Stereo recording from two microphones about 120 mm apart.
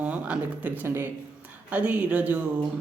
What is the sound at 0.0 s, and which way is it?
A man's voice, 10° right (ahead or behind).